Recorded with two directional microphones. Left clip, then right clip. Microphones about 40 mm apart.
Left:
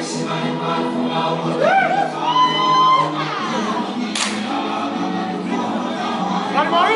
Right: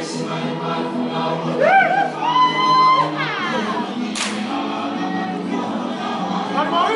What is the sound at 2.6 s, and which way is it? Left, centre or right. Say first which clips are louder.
Music: even; right.